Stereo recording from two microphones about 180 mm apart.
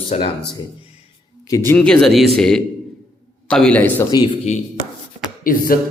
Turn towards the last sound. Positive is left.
turn(degrees=50)  # may be behind; listen again after turning